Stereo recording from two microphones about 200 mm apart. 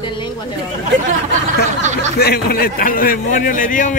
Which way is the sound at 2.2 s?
50° left (ahead or behind).